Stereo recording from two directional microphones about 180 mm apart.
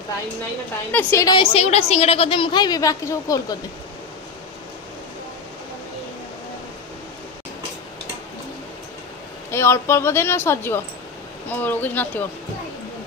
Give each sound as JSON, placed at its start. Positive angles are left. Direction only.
{"t": 0.9, "sound": "a woman's voice", "side_deg": 20}
{"t": 9.5, "sound": "speech", "side_deg": 15}